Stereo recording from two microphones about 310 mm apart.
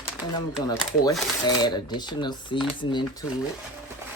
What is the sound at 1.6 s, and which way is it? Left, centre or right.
Speech, centre.